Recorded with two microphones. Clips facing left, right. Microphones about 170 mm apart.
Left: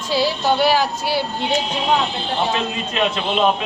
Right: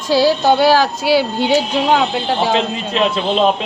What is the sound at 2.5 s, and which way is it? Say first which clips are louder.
Speech: right 5 dB; 30° right (ahead or behind).